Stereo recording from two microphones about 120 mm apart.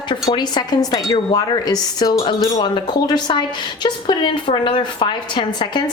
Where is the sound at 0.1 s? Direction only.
40° left (ahead or behind).